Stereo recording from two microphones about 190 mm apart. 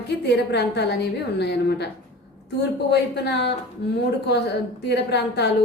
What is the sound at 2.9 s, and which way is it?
Speech, 60° left (ahead or behind).